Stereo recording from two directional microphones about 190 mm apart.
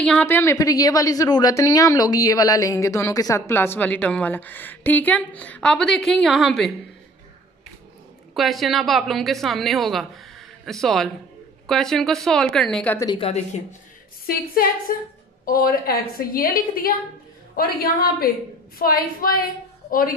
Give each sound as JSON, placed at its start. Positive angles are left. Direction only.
{"t": 0.0, "sound": "a woman's voice", "side_deg": 5}
{"t": 8.4, "sound": "a woman's voice", "side_deg": 0}
{"t": 13.0, "sound": "speech", "side_deg": 25}
{"t": 14.2, "sound": "a woman's voice", "side_deg": 50}